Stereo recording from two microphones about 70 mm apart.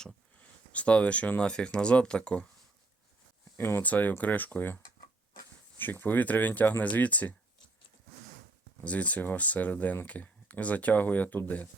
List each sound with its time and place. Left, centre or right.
0.7 s speech: centre
3.6 s speech: left
5.8 s speech: left
8.8 s speech: centre